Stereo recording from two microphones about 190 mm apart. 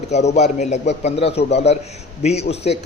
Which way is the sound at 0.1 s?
35° left (ahead or behind).